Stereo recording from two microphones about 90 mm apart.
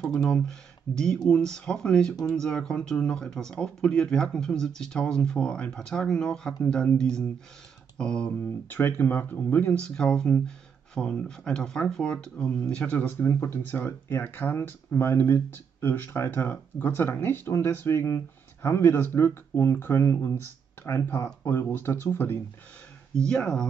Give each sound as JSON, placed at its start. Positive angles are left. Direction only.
{"t": 0.0, "sound": "speech", "side_deg": 5}
{"t": 8.6, "sound": "speech", "side_deg": 20}
{"t": 12.9, "sound": "speech", "side_deg": 25}
{"t": 23.1, "sound": "speech", "side_deg": 10}